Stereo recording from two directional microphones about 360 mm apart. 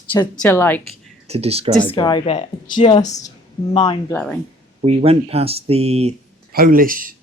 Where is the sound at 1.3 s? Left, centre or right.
Centre.